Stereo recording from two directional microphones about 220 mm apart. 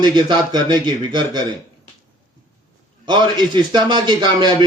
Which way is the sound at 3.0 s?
20° right (ahead or behind).